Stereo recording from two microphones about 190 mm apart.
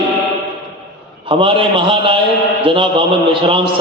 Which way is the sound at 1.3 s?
30° right (ahead or behind).